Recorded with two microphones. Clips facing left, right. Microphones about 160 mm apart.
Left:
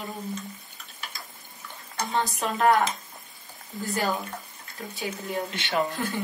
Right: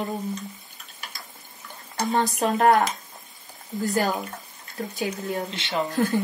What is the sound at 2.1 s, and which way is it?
Speech, 40° right (ahead or behind).